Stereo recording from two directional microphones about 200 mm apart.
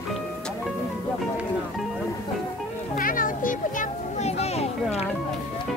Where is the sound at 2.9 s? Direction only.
45° left (ahead or behind).